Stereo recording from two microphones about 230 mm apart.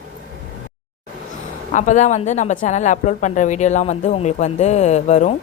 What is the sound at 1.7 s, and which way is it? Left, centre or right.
A woman's voice, left.